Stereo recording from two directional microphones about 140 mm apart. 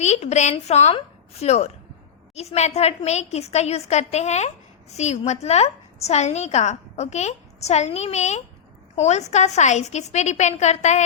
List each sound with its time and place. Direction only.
0.0 s a woman's voice: 55° left (ahead or behind)